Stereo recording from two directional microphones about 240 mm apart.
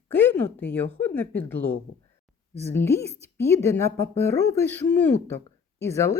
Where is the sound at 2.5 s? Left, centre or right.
Centre.